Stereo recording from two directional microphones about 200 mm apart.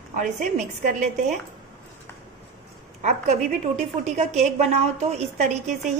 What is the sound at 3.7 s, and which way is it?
A woman's voice, 35° right (ahead or behind).